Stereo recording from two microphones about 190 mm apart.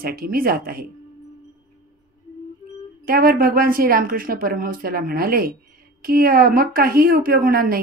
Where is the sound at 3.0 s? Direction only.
50° right (ahead or behind).